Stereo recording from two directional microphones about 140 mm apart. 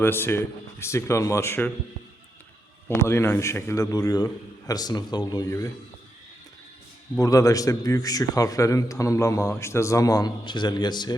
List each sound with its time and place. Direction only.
0.0 s a man's voice: 15° left (ahead or behind)
3.1 s a man's voice: 20° left (ahead or behind)
7.2 s a man's voice: 25° left (ahead or behind)